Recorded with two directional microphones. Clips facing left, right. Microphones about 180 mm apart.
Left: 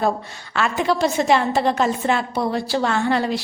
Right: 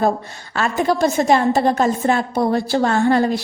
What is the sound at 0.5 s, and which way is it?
A woman's voice, 40° right (ahead or behind).